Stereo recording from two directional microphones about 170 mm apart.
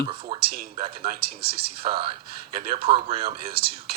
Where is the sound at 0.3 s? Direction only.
65° right (ahead or behind).